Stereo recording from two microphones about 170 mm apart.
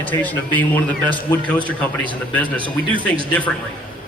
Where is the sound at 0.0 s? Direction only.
10° left (ahead or behind).